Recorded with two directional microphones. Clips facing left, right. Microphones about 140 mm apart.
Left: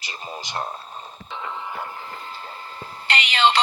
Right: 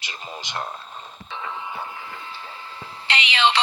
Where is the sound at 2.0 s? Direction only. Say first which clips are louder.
Left 1 dB; 40° left (ahead or behind).